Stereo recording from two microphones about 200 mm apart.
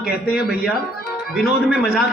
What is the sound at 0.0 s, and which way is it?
Speech, 50° left (ahead or behind).